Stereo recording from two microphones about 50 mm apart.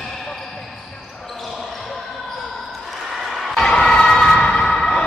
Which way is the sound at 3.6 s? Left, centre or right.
Centre.